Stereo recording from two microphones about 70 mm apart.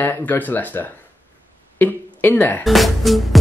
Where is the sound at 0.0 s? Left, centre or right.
Left.